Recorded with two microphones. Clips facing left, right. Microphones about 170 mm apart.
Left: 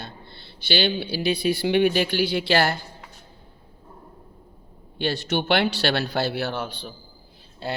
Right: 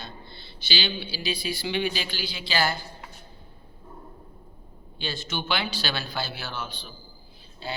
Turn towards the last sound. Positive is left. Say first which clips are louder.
# left 5 dB
turn(degrees=65)  # may be behind; listen again after turning